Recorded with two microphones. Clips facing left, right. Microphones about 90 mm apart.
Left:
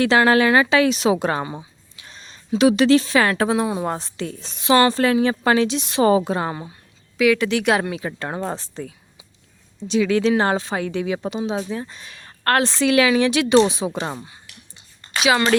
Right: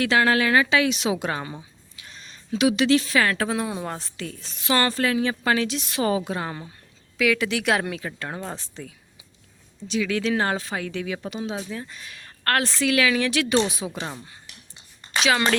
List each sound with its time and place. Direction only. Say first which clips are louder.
0.0 s a woman's voice: left 5 dB; 30° left (ahead or behind)
1.5 s a sound: left 5 dB; 30° left (ahead or behind)
2.6 s a woman's voice: left 5 dB; 40° left (ahead or behind); by 4.9 s 20° left (ahead or behind)
4.9 s a woman's voice: left 5 dB; 30° left (ahead or behind)
7.2 s a woman's voice: left 5 dB; centre (ahead or behind)
8.0 s a woman's voice: left 6 dB; 35° left (ahead or behind)
14.0 s a woman's voice: left 5 dB; 40° left (ahead or behind)
15.1 s a sound: left 3 dB; 15° right (ahead or behind)